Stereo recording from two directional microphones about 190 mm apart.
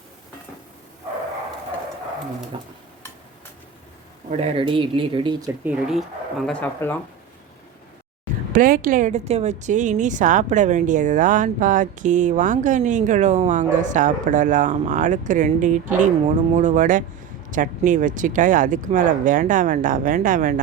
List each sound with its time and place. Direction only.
2.5 s speech: 25° right (ahead or behind)
4.3 s speech: 30° right (ahead or behind)
5.6 s speech: centre (ahead or behind)
8.5 s speech: 45° right (ahead or behind)